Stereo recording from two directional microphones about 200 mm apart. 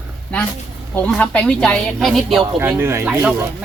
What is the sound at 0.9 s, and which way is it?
Speech, 5° left (ahead or behind).